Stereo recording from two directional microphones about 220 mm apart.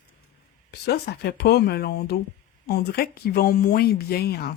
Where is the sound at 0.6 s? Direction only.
45° left (ahead or behind).